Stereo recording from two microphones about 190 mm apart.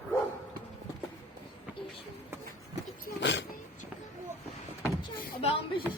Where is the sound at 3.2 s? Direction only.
65° left (ahead or behind).